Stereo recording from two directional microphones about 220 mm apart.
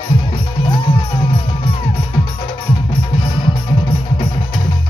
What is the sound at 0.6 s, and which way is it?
Music, 20° left (ahead or behind).